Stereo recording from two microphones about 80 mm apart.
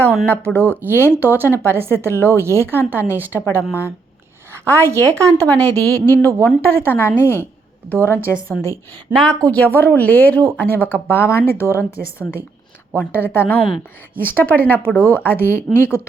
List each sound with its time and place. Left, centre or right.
0.3 s a woman's voice: centre
0.6 s speech: right
1.5 s speech: left
1.7 s a woman's voice: right
3.6 s speech: left
4.5 s a woman's voice: right
5.4 s a woman's voice: centre
9.1 s a woman's voice: centre; by 16.0 s left